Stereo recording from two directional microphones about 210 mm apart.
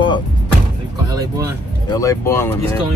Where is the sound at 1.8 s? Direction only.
15° left (ahead or behind).